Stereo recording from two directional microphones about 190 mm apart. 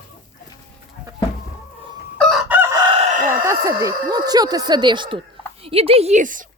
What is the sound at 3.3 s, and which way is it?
Speech, 15° right (ahead or behind).